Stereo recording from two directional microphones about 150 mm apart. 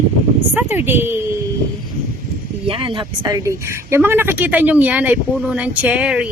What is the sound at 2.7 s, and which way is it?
Speech, 35° right (ahead or behind).